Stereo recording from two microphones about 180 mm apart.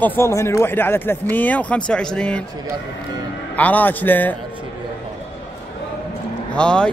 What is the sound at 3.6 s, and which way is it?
Speech, 10° left (ahead or behind).